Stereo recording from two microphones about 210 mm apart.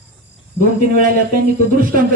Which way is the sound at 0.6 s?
45° right (ahead or behind).